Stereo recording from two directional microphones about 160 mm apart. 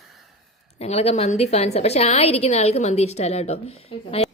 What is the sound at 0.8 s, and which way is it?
A woman's voice, 40° left (ahead or behind).